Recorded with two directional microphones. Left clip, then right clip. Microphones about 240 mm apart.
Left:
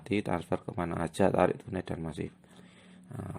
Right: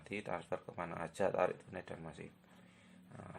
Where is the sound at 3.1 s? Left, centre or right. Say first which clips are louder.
Left 10 dB; left.